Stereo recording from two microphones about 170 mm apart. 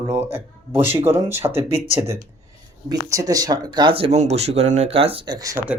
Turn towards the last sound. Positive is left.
turn(degrees=-20)  # may be behind; listen again after turning